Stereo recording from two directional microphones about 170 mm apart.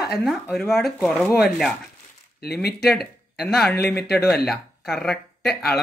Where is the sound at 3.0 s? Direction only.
Centre (ahead or behind).